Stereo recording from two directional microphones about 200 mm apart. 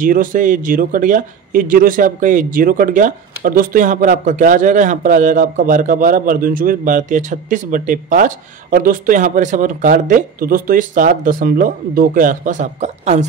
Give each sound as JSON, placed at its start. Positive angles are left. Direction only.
{"t": 0.0, "sound": "a man's voice", "side_deg": -45}